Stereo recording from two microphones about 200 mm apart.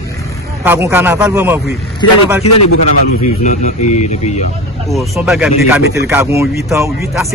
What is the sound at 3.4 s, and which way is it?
Speech, 35° left (ahead or behind).